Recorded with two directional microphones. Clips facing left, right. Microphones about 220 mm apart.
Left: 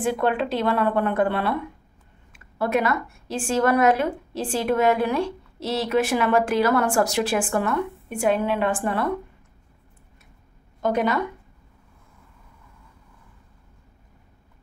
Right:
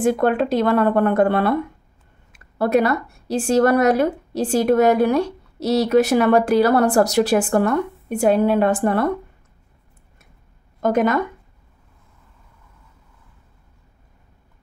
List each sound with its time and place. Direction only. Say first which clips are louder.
0.0 s a woman's voice: right 5 dB; 45° right (ahead or behind)
10.8 s speech: right 4 dB; 50° right (ahead or behind)